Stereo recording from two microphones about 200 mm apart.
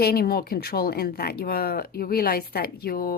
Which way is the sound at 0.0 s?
50° left (ahead or behind).